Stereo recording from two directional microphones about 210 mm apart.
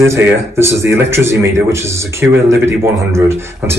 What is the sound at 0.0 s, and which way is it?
A man's voice, 10° right (ahead or behind).